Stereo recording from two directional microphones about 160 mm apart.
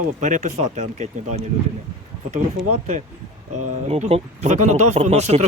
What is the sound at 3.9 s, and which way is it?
Speech, 40° right (ahead or behind).